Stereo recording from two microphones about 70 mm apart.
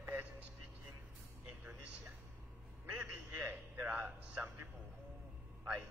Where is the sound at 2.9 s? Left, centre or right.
Centre.